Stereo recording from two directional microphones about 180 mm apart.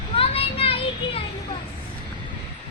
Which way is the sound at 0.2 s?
30° left (ahead or behind).